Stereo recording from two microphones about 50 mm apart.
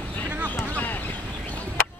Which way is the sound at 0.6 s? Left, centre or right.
Left.